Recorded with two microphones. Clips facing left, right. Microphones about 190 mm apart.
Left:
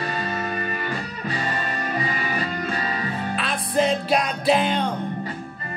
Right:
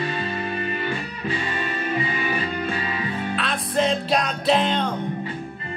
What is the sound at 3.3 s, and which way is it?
Music, 5° left (ahead or behind).